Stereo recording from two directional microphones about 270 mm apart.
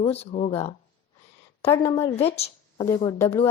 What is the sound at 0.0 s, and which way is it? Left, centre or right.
A woman's voice, left.